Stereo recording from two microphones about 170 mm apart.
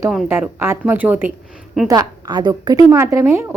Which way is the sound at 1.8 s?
20° right (ahead or behind).